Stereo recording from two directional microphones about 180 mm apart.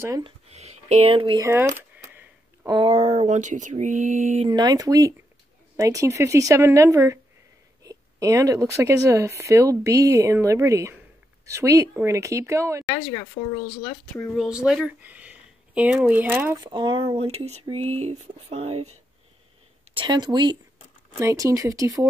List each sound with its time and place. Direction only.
0.2 s speech: 35° right (ahead or behind)
1.4 s speech: 15° right (ahead or behind)
2.6 s speech: 30° right (ahead or behind)
4.5 s speech: 25° right (ahead or behind)
14.1 s speech: 5° left (ahead or behind)
16.6 s speech: 25° right (ahead or behind)
19.9 s speech: 25° right (ahead or behind)